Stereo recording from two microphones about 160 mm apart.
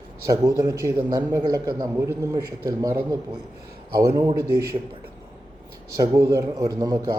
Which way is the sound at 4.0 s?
20° right (ahead or behind).